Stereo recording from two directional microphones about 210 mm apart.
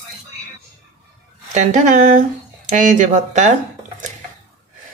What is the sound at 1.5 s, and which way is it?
Speech, 35° right (ahead or behind).